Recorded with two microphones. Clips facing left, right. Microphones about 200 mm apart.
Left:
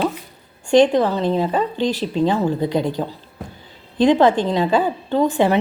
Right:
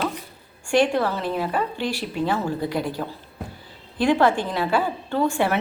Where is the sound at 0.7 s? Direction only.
20° left (ahead or behind).